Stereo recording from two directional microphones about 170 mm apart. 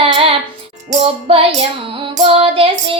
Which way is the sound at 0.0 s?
35° right (ahead or behind).